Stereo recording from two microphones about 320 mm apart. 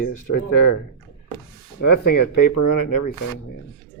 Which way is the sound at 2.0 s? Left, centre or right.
Left.